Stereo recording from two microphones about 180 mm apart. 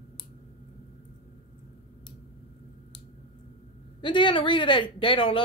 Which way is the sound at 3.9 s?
25° left (ahead or behind).